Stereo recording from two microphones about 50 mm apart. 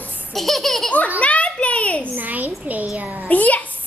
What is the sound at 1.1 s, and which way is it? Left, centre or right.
Speech, left.